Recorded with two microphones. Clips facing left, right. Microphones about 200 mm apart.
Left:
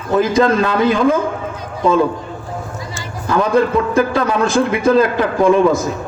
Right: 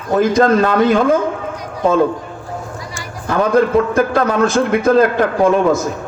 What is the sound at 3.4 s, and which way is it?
A man's voice, 50° right (ahead or behind).